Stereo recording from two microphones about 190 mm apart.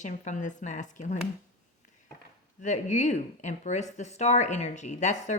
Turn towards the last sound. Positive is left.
turn(degrees=40)  # may be behind; listen again after turning